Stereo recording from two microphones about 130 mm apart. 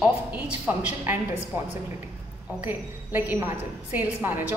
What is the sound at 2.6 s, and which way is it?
A woman's voice, 15° right (ahead or behind).